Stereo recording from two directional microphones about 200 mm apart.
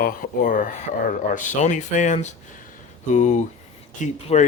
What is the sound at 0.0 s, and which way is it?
Speech, 45° left (ahead or behind).